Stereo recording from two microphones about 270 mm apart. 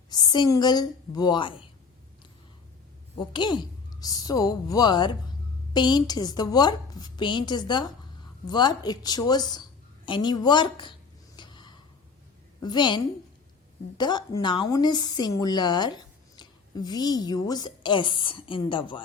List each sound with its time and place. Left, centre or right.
0.1 s a woman's voice: centre
3.2 s a woman's voice: centre
11.3 s gasp: centre
12.6 s a woman's voice: centre
14.0 s a woman's voice: centre